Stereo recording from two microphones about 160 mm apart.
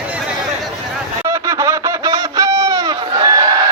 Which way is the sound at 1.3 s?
15° right (ahead or behind).